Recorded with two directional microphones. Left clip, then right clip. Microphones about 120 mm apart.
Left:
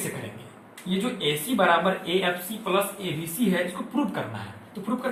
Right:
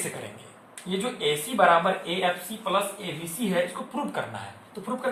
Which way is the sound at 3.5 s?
30° right (ahead or behind).